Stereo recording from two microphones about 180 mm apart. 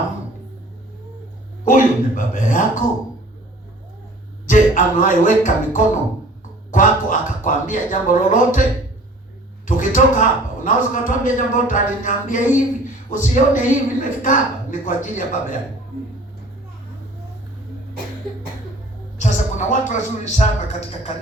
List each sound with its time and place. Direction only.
1.6 s a woman's voice: 45° left (ahead or behind)
4.4 s music: 45° left (ahead or behind)
6.7 s a woman's voice: 45° left (ahead or behind)
9.6 s a woman's voice: 45° left (ahead or behind)
19.2 s speech: 45° left (ahead or behind)